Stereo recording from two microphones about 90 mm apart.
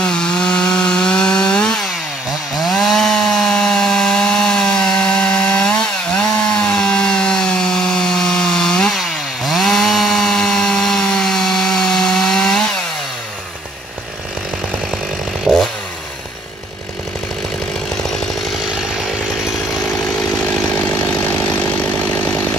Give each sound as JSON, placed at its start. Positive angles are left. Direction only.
{"t": 0.0, "sound": "wood", "side_deg": 10}
{"t": 2.5, "sound": "chainsaw", "side_deg": 0}
{"t": 15.5, "sound": "chainsaw", "side_deg": -5}
{"t": 20.7, "sound": "chainsaw", "side_deg": 25}